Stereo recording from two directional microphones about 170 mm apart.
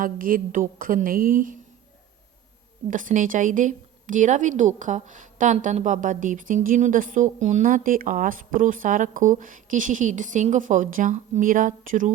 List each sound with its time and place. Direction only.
0.0 s a woman's voice: 55° right (ahead or behind)
2.8 s a woman's voice: 50° right (ahead or behind)